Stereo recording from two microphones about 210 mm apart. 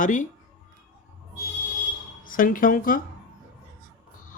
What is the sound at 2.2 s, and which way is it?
Speech, 40° left (ahead or behind).